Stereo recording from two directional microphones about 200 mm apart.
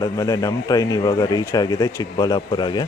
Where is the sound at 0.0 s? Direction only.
15° left (ahead or behind).